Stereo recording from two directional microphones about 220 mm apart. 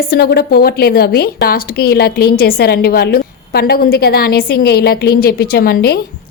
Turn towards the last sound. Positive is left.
turn(degrees=45)  # may be behind; listen again after turning